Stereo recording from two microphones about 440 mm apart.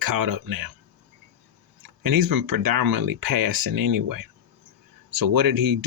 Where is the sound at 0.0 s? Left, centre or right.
Right.